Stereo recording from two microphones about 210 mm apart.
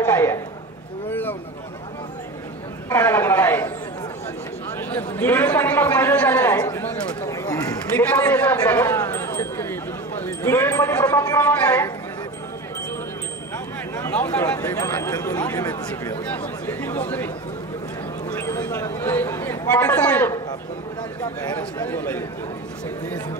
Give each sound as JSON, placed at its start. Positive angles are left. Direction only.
{"t": 0.0, "sound": "a sound", "side_deg": 10}
{"t": 2.9, "sound": "a man's voice", "side_deg": 10}
{"t": 4.9, "sound": "speech", "side_deg": 10}
{"t": 6.6, "sound": "a sound", "side_deg": 10}
{"t": 8.0, "sound": "speech", "side_deg": 5}
{"t": 13.9, "sound": "speech", "side_deg": 10}
{"t": 18.4, "sound": "speech", "side_deg": 10}